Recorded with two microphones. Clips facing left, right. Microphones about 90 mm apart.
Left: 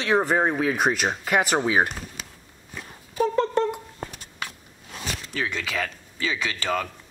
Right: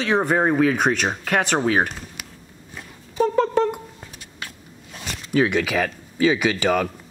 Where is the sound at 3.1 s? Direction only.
Centre (ahead or behind).